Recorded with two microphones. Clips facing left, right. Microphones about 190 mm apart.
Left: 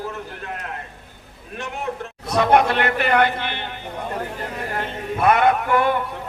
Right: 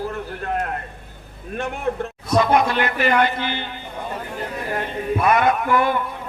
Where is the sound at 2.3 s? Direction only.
65° left (ahead or behind).